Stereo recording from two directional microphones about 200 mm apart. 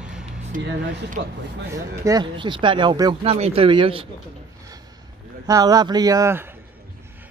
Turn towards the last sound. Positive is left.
turn(degrees=-15)  # may be behind; listen again after turning